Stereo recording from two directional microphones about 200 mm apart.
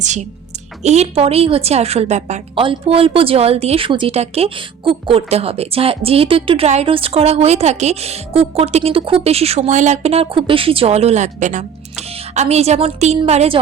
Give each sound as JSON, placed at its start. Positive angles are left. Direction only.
{"t": 0.0, "sound": "a woman's voice", "side_deg": -35}